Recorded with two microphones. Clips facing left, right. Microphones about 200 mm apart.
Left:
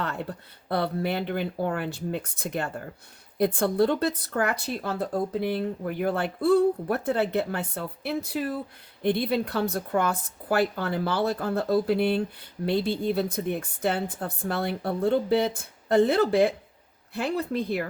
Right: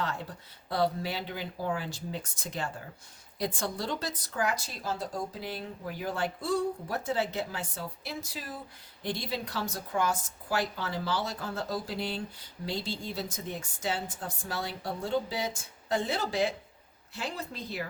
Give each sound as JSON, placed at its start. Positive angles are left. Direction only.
{"t": 0.0, "sound": "a woman's voice", "side_deg": 60}